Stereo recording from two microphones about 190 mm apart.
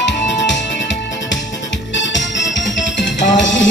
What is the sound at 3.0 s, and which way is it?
Music, 75° left (ahead or behind).